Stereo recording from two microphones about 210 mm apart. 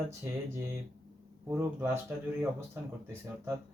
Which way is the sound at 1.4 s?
10° right (ahead or behind).